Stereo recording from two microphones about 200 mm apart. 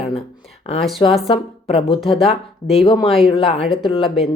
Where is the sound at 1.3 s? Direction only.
30° left (ahead or behind).